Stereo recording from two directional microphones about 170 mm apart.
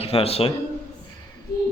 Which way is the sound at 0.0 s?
35° left (ahead or behind).